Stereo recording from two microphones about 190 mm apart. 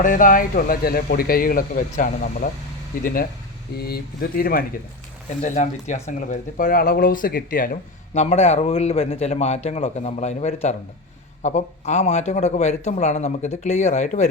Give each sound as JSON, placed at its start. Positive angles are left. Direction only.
{"t": 0.0, "sound": "speech", "side_deg": 45}
{"t": 5.4, "sound": "speech", "side_deg": 40}